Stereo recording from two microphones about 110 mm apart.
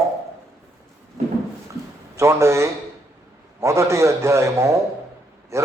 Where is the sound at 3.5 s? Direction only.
25° right (ahead or behind).